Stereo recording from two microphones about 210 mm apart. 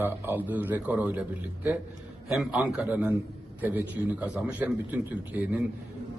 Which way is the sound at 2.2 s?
Centre (ahead or behind).